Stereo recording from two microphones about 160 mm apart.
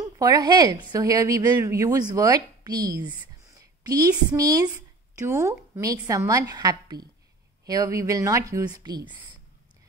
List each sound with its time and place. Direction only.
0.0 s a woman's voice: 25° right (ahead or behind)